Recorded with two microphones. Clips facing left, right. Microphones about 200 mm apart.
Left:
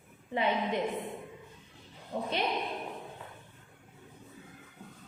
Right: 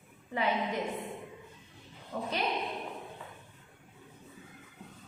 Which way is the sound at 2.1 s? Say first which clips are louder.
Left 2 dB; 35° left (ahead or behind).